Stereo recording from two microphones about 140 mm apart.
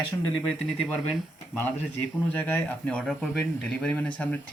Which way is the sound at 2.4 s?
15° left (ahead or behind).